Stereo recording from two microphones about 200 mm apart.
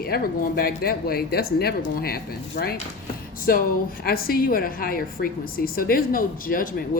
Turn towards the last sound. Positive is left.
turn(degrees=45)  # may be behind; listen again after turning